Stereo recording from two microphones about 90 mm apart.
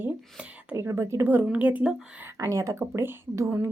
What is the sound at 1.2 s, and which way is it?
Speech, 20° right (ahead or behind).